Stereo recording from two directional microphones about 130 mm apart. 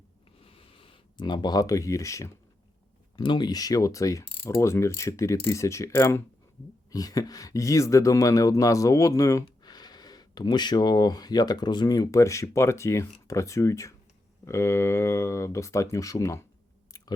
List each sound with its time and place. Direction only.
0.4 s a sound: 45° left (ahead or behind); by 2.3 s 25° left (ahead or behind)
3.2 s speech: 35° left (ahead or behind)
16.9 s chewing: 25° left (ahead or behind)